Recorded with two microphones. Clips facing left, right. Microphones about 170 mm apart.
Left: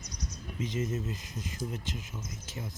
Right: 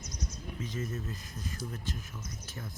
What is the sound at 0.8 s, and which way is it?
Speech, 20° left (ahead or behind).